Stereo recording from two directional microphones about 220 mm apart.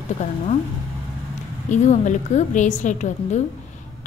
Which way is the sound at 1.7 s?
35° left (ahead or behind).